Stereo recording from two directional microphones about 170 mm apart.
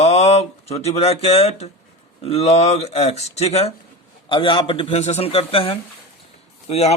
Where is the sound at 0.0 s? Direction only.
40° left (ahead or behind).